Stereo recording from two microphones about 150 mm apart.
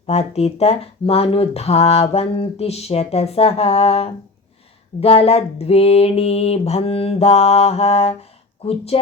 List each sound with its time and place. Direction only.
0.1 s speech: 45° left (ahead or behind)